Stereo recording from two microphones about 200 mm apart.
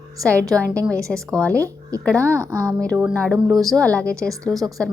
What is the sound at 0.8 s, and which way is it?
Speech, 15° right (ahead or behind).